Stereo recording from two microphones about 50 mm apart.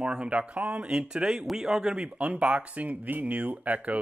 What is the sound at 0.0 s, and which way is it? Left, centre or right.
Speech, centre.